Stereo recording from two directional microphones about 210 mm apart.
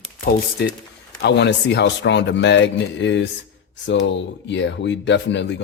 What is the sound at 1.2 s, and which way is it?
Speech, 55° left (ahead or behind).